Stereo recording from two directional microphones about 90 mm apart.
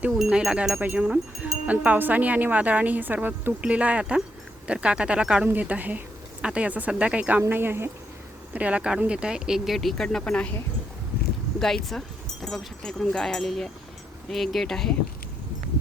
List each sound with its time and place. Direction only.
0.1 s speech: 5° right (ahead or behind); by 7.9 s 25° right (ahead or behind)
8.5 s speech: 15° right (ahead or behind); by 10.5 s 10° left (ahead or behind)
11.6 s speech: 5° left (ahead or behind)